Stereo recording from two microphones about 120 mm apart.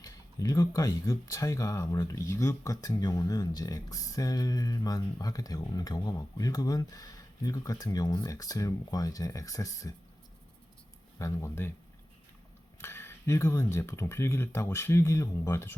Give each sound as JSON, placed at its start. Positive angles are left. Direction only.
{"t": 0.0, "sound": "speech", "side_deg": 30}
{"t": 11.2, "sound": "speech", "side_deg": 25}
{"t": 12.8, "sound": "speech", "side_deg": 20}